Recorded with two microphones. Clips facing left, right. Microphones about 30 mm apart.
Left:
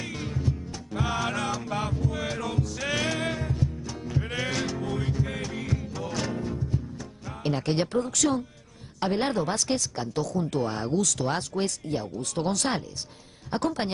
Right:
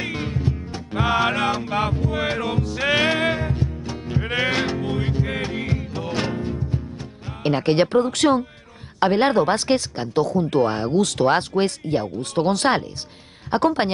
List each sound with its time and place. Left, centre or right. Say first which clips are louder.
0.0 s music: right 6 dB; right
7.2 s speech: right 8 dB; right